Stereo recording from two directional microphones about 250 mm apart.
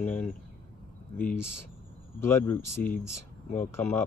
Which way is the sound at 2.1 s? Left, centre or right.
Centre.